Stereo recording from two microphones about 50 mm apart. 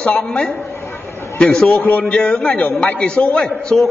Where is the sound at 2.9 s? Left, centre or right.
Centre.